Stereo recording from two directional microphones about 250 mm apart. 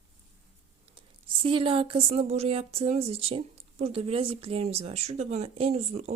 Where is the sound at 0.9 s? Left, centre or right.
Right.